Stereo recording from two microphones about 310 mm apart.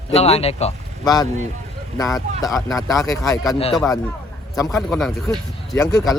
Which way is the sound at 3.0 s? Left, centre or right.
Centre.